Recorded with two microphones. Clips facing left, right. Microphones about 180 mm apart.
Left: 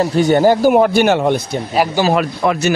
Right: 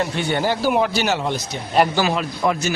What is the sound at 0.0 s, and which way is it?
A man's voice, 40° left (ahead or behind).